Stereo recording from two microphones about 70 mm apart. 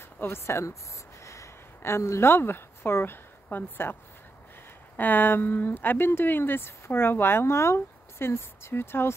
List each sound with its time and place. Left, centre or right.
0.2 s speech: left
1.2 s a sound: left
1.8 s speech: left
4.9 s speech: left